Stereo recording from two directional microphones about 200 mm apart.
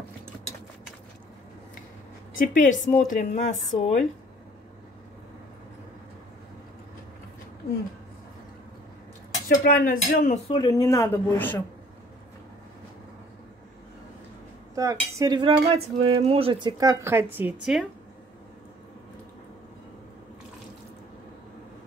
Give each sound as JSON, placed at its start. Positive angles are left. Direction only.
{"t": 2.3, "sound": "a woman's voice", "side_deg": 40}
{"t": 9.5, "sound": "a woman's voice", "side_deg": 40}
{"t": 10.5, "sound": "speech", "side_deg": 20}
{"t": 14.8, "sound": "cutlery", "side_deg": -15}
{"t": 16.8, "sound": "speech", "side_deg": -15}